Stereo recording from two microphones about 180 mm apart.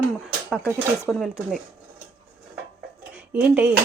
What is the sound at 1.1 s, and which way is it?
Speech, centre (ahead or behind).